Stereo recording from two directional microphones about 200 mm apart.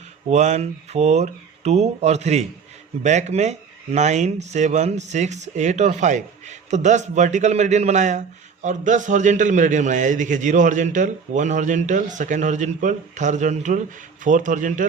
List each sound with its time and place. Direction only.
0.3 s a man's voice: 35° right (ahead or behind)